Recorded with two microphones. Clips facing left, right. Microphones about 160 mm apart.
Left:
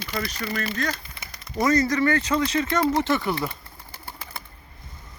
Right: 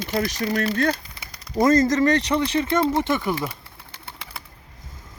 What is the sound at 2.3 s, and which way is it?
Speech, 15° right (ahead or behind).